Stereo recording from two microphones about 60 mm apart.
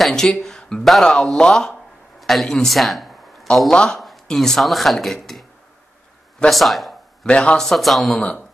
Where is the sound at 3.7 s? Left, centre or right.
Centre.